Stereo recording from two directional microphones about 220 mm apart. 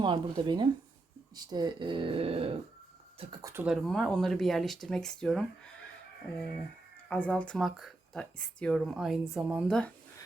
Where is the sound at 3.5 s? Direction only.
5° right (ahead or behind).